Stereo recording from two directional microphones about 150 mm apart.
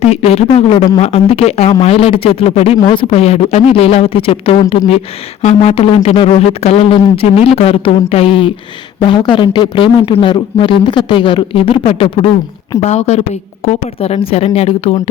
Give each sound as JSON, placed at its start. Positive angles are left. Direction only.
{"t": 0.0, "sound": "speech", "side_deg": 45}